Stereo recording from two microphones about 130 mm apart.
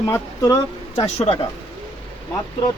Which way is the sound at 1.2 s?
50° left (ahead or behind).